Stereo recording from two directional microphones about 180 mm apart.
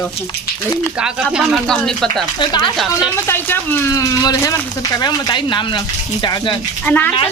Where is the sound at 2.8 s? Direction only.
5° right (ahead or behind).